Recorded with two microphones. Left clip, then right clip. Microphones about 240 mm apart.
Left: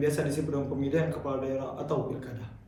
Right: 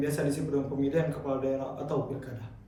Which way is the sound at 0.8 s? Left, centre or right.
Centre.